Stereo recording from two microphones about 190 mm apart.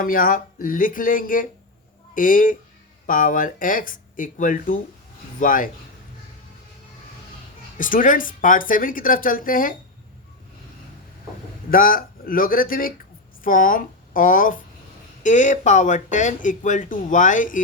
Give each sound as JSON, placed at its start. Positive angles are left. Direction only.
{"t": 0.0, "sound": "speech", "side_deg": 45}
{"t": 7.8, "sound": "speech", "side_deg": 45}
{"t": 11.7, "sound": "a woman's voice", "side_deg": 50}